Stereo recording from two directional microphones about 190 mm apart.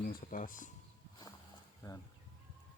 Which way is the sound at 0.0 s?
45° left (ahead or behind).